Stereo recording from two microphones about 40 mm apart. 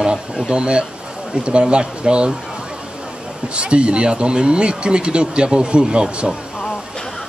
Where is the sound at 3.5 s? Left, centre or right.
Right.